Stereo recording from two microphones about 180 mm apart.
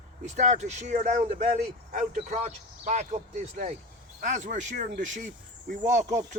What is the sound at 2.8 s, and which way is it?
Speech, 40° right (ahead or behind).